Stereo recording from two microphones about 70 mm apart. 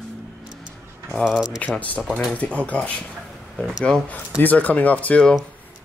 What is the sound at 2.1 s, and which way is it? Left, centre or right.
Speech, centre.